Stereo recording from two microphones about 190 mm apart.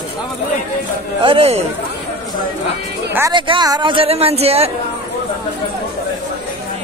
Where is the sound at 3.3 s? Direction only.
25° right (ahead or behind).